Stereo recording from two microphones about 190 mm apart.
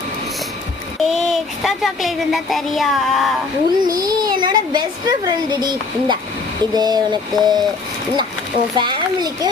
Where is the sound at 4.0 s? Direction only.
20° right (ahead or behind).